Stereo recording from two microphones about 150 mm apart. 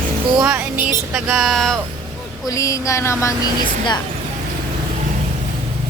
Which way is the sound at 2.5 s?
20° left (ahead or behind).